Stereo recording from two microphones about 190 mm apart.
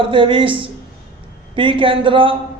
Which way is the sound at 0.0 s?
25° right (ahead or behind).